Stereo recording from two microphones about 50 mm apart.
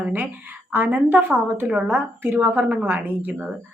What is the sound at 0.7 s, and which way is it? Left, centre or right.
A woman's voice, right.